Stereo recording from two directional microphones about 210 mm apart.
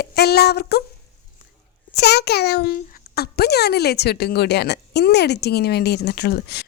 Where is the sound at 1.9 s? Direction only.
50° left (ahead or behind).